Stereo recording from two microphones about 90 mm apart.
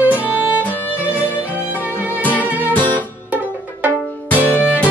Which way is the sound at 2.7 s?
20° left (ahead or behind).